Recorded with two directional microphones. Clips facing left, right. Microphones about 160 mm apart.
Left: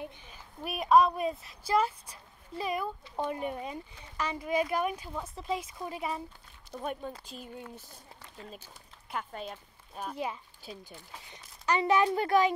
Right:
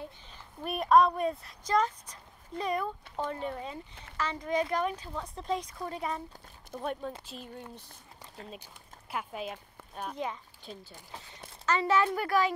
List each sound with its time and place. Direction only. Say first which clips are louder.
0.0 s speech: left 2 dB; 5° left (ahead or behind)
9.1 s speech: right 1 dB; 5° right (ahead or behind)
9.9 s speech: even; 10° left (ahead or behind)